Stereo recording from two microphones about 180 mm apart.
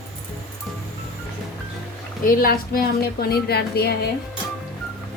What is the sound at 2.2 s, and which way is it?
A woman's voice, 55° left (ahead or behind).